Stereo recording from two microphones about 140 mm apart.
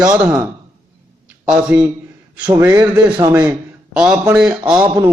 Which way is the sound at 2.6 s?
20° right (ahead or behind).